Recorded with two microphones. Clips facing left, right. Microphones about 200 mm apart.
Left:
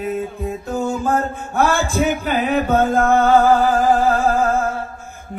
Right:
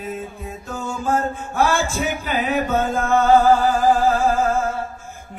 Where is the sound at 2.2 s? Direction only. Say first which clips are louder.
Left 3 dB; 55° left (ahead or behind).